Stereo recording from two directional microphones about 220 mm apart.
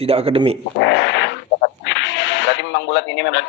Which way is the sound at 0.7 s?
55° left (ahead or behind).